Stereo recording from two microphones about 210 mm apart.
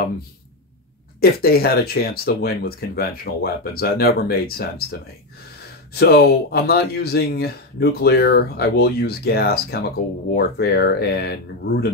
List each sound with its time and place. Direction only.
1.2 s speech: 45° left (ahead or behind)
5.9 s speech: 50° left (ahead or behind)